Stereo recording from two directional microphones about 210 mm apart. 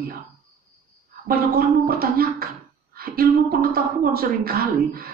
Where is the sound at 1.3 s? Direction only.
45° right (ahead or behind).